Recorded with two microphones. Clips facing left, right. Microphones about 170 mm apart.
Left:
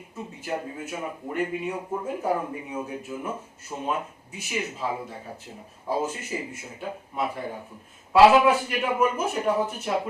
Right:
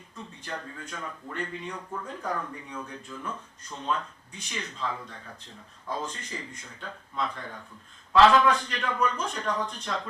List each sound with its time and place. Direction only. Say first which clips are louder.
0.2 s a man's voice: left 7 dB; 10° left (ahead or behind)
2.4 s speech: left 5 dB; 20° left (ahead or behind)
2.8 s a man's voice: left 6 dB; 10° left (ahead or behind)